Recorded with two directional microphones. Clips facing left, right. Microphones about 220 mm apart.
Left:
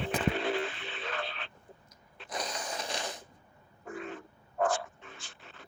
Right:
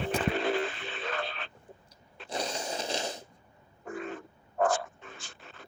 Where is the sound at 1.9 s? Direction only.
30° right (ahead or behind).